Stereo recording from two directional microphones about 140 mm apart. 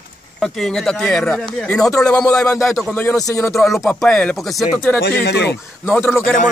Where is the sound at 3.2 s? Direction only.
25° left (ahead or behind).